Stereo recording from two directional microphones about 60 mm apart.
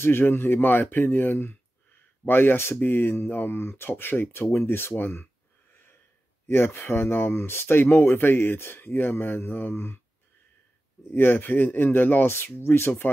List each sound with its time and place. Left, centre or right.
0.0 s speech: left
6.4 s speech: left
11.1 s speech: left